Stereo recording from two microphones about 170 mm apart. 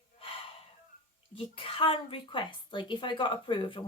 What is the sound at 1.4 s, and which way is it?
A woman's voice, 30° left (ahead or behind).